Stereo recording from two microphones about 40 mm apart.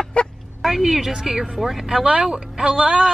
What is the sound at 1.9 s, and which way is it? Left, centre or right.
Speech, right.